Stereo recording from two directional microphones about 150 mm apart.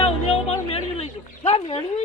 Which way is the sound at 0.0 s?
40° left (ahead or behind).